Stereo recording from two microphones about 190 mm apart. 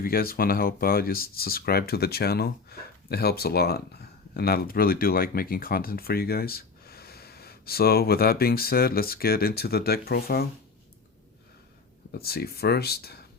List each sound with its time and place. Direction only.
0.0 s speech: 50° left (ahead or behind)
12.1 s speech: 55° left (ahead or behind)